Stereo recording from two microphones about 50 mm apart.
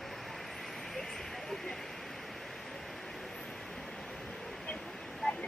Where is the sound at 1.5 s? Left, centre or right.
Centre.